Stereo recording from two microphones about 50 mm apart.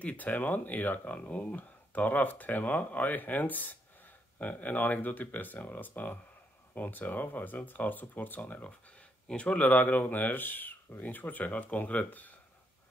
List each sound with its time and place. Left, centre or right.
0.0 s speech: left
9.7 s speech: left